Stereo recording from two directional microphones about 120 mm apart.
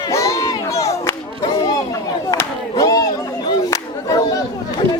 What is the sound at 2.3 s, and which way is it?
Crowd, 30° left (ahead or behind).